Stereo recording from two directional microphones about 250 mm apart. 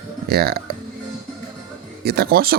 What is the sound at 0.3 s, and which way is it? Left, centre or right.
Speech, right.